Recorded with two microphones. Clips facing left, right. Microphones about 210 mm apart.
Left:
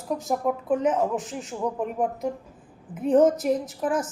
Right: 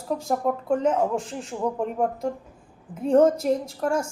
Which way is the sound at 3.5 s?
5° left (ahead or behind).